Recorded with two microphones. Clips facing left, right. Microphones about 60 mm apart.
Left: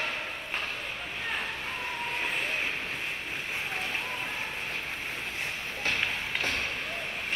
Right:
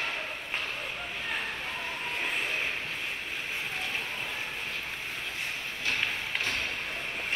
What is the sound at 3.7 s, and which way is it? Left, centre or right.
Fire, left.